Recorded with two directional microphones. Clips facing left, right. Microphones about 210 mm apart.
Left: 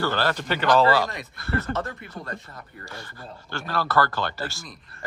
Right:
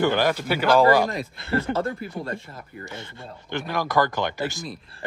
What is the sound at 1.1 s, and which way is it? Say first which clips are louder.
Speech: right 3 dB; 25° right (ahead or behind).